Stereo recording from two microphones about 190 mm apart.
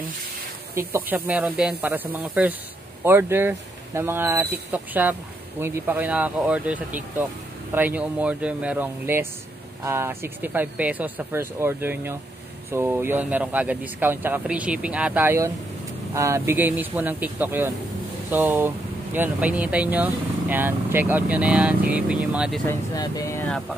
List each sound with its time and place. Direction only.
0.7 s speech: 10° right (ahead or behind)
22.7 s speech: 15° left (ahead or behind)